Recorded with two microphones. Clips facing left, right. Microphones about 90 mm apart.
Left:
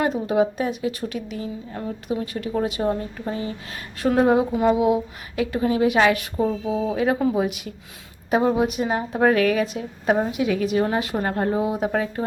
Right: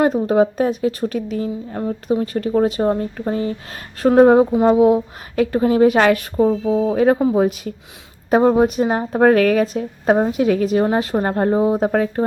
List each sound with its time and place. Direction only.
0.0 s a woman's voice: 40° right (ahead or behind)